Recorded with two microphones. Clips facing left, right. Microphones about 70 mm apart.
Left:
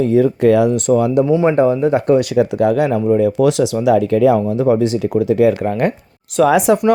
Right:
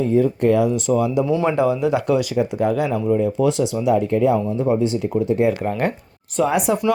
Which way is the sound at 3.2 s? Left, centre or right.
Left.